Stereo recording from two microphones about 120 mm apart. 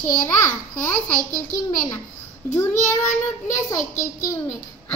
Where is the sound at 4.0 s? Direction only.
25° left (ahead or behind).